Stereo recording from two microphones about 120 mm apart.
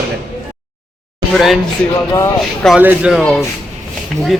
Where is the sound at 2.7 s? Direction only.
10° right (ahead or behind).